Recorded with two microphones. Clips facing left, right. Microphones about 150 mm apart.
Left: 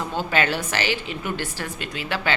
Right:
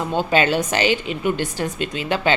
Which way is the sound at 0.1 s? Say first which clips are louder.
Right 6 dB; 20° right (ahead or behind).